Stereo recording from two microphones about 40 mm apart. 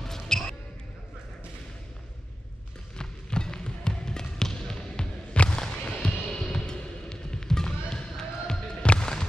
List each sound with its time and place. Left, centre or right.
0.0 s basketball bounce: centre
3.0 s trickle: centre
5.9 s music: left
6.5 s basketball bounce: centre